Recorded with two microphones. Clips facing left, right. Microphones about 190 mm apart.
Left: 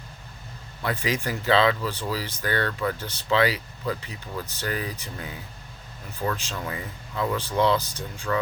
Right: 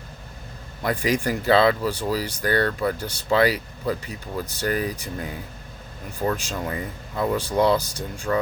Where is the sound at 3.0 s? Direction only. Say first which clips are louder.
Right 4 dB; 10° right (ahead or behind).